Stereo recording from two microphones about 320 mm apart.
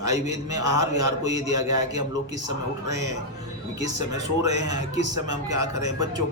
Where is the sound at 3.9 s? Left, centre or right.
Right.